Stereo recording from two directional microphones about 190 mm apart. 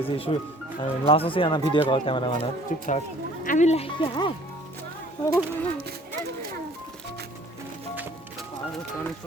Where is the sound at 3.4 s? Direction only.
40° left (ahead or behind); by 4.3 s 25° left (ahead or behind).